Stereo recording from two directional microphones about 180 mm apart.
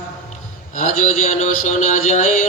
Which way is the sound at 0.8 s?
45° left (ahead or behind).